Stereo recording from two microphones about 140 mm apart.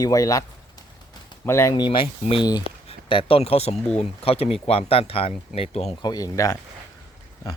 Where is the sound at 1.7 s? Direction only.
35° left (ahead or behind).